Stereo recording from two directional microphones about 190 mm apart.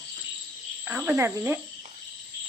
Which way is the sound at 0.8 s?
10° right (ahead or behind).